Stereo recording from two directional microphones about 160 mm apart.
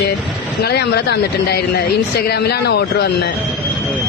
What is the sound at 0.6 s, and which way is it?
Speech, 90° left.